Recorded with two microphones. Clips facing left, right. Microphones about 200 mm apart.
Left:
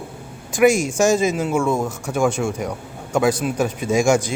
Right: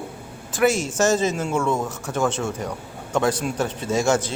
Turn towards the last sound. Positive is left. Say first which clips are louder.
# left 4 dB
turn(degrees=10)  # may be behind; listen again after turning